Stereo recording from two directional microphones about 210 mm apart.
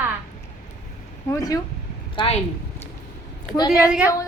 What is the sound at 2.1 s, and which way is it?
Speech, 25° left (ahead or behind).